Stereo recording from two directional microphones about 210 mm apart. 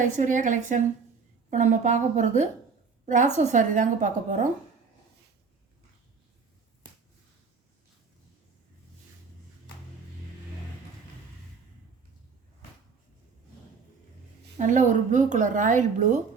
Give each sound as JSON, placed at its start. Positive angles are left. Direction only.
{"t": 0.0, "sound": "a woman's voice", "side_deg": -35}
{"t": 14.6, "sound": "a woman's voice", "side_deg": -35}